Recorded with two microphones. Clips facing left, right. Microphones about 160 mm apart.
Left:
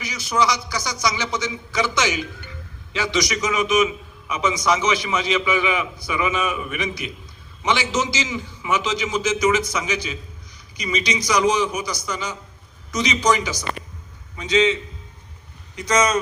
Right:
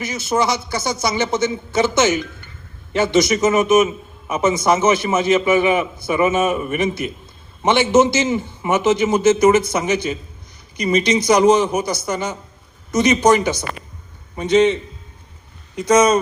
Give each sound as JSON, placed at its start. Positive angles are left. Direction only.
{"t": 0.0, "sound": "a man's voice", "side_deg": -50}